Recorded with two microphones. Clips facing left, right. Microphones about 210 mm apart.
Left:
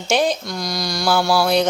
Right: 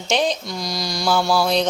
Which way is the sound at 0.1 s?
5° left (ahead or behind).